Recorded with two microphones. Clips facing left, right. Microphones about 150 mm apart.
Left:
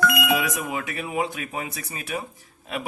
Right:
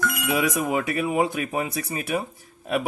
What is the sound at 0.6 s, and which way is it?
Speech, 40° right (ahead or behind).